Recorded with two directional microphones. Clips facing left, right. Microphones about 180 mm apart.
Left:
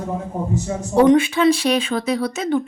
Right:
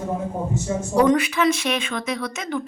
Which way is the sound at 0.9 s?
25° left (ahead or behind).